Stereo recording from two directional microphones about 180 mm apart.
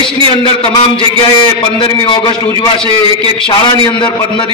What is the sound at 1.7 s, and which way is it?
Speech, 25° left (ahead or behind).